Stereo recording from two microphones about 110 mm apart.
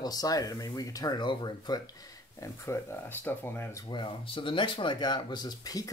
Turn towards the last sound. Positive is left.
turn(degrees=35)  # may be behind; listen again after turning